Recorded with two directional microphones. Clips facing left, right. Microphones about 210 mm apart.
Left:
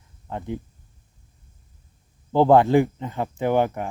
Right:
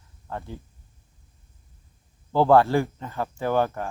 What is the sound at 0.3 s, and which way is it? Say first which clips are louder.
Speech: left 5 dB; 20° left (ahead or behind).